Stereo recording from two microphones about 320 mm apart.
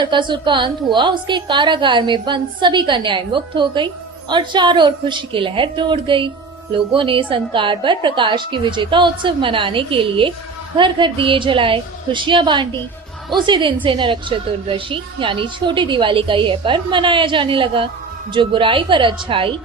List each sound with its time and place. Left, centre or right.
0.0 s a woman's voice: centre